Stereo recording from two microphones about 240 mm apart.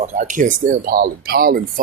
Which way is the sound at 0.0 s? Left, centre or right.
Right.